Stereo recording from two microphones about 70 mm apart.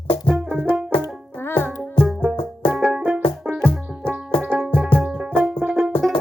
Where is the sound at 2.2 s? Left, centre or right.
Right.